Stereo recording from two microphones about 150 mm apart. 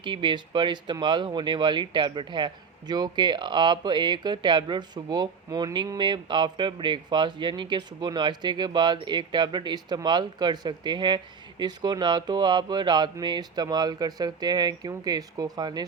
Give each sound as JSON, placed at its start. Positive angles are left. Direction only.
{"t": 0.0, "sound": "speech", "side_deg": -35}